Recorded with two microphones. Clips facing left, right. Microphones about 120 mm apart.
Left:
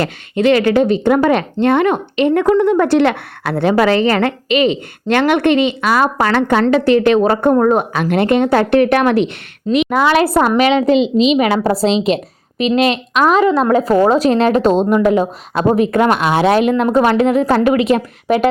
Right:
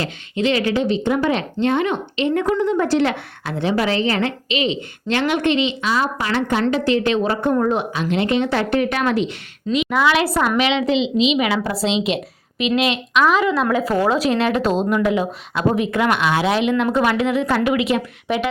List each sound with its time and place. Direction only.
0.0 s a woman's voice: 55° left (ahead or behind)
9.9 s a woman's voice: 45° left (ahead or behind)